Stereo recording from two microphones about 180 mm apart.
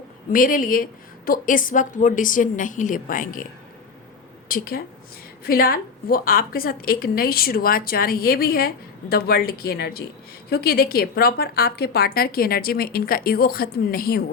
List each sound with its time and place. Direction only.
0.3 s a woman's voice: 50° left (ahead or behind)
4.4 s a woman's voice: 55° left (ahead or behind)